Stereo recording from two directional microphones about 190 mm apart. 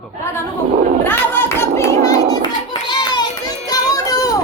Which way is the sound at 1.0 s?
10° left (ahead or behind).